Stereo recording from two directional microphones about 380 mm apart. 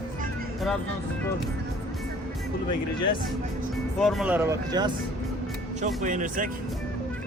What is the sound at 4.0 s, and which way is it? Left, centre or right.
Speech, centre.